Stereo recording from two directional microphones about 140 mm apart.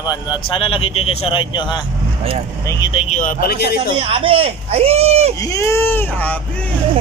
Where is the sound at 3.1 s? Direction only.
75° left (ahead or behind).